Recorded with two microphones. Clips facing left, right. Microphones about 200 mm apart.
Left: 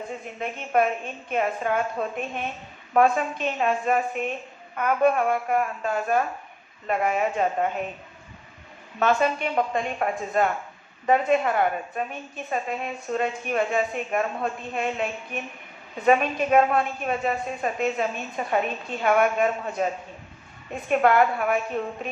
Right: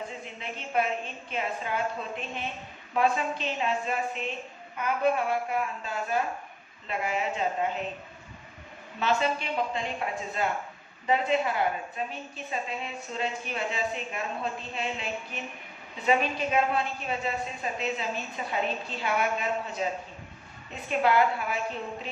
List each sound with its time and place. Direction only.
0.3 s a woman's voice: 50° left (ahead or behind)
9.0 s a woman's voice: 55° left (ahead or behind)
21.0 s a woman's voice: 55° left (ahead or behind)